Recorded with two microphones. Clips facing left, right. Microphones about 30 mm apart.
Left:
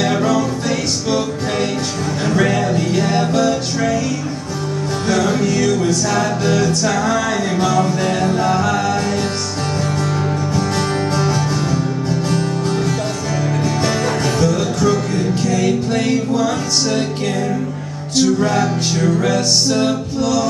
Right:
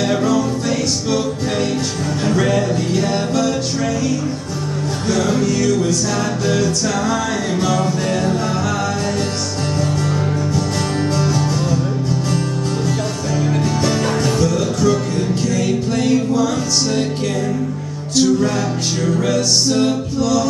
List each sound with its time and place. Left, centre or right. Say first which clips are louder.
0.0 s music: even; centre
5.0 s music: left 1 dB; centre
7.6 s music: left 3 dB; centre
8.1 s music: left 2 dB; centre
11.1 s music: even; centre
14.2 s music: even; centre
18.1 s music: even; centre